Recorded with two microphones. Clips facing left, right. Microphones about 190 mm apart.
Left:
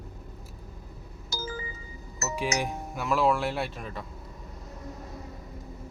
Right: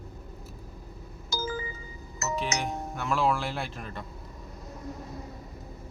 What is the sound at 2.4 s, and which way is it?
Speech, 10° left (ahead or behind).